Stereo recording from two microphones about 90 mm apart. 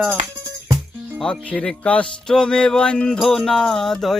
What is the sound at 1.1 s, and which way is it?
Music, 5° left (ahead or behind).